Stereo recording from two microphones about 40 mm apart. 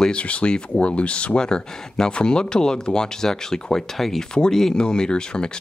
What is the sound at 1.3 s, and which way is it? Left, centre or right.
Speech, centre.